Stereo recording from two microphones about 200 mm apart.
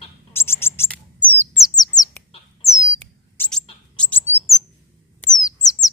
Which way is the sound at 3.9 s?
10° left (ahead or behind).